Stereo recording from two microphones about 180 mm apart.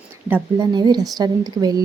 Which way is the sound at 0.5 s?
25° right (ahead or behind).